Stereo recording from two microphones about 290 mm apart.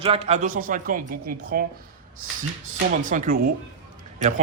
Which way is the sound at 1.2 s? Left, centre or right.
Right.